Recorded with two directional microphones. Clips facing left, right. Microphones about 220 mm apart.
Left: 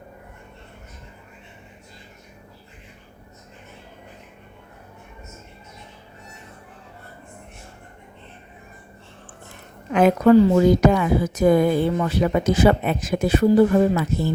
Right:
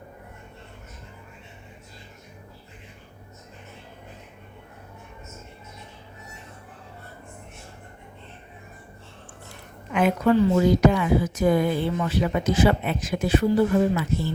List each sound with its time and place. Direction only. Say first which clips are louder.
9.9 s speech: left 6 dB; 40° left (ahead or behind)